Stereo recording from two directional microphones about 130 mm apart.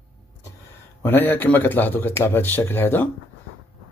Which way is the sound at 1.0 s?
15° left (ahead or behind).